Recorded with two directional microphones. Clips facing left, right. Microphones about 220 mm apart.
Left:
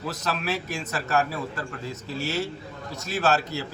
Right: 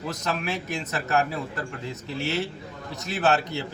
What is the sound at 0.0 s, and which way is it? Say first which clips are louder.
A man's voice: even; 15° right (ahead or behind).